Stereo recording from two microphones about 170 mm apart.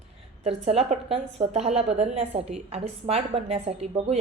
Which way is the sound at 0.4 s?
35° right (ahead or behind).